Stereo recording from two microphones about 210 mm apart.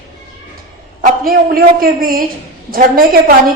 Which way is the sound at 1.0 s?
45° right (ahead or behind).